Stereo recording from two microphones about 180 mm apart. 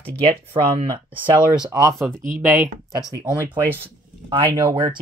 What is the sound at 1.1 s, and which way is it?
Speech, 5° right (ahead or behind).